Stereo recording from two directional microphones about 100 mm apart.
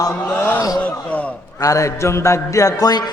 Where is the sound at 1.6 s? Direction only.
35° left (ahead or behind).